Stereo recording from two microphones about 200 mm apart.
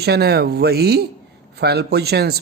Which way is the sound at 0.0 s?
55° right (ahead or behind).